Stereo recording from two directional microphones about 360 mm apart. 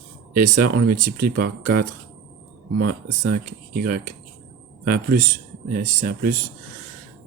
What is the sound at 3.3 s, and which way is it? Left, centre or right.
Speech, right.